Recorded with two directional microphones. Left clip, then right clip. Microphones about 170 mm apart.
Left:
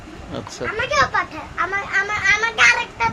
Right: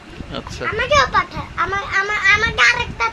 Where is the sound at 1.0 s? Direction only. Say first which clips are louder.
Right 1 dB; 75° right (ahead or behind).